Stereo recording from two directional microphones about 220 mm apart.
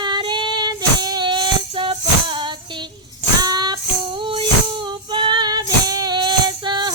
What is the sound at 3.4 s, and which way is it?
Music, 20° right (ahead or behind).